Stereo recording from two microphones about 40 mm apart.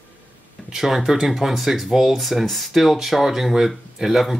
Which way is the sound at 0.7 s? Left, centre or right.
Centre.